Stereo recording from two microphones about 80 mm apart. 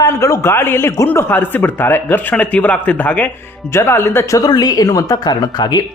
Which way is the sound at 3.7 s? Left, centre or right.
Left.